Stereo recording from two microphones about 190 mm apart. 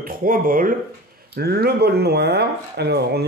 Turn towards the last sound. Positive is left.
turn(degrees=-60)  # may be behind; listen again after turning